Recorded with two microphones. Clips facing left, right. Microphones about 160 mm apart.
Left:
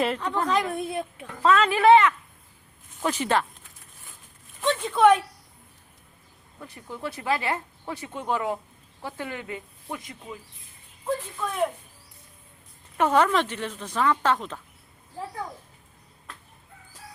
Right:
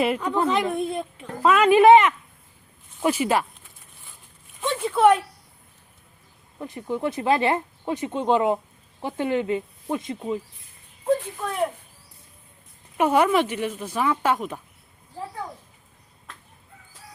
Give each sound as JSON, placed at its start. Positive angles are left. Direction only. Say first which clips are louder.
{"t": 0.0, "sound": "speech", "louder": "right 4 dB", "side_deg": -10}
{"t": 1.4, "sound": "speech", "louder": "right 5 dB", "side_deg": -15}
{"t": 4.8, "sound": "speech", "louder": "right 1 dB", "side_deg": -5}
{"t": 6.6, "sound": "speech", "louder": "right 8 dB", "side_deg": -20}
{"t": 13.0, "sound": "speech", "louder": "right 2 dB", "side_deg": -10}